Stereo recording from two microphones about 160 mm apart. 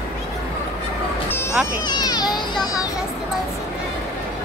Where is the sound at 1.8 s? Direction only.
25° left (ahead or behind).